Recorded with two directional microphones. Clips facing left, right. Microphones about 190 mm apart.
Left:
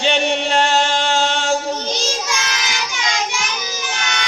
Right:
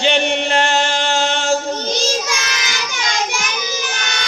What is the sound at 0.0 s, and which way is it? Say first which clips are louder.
Chant: right 1 dB; centre (ahead or behind).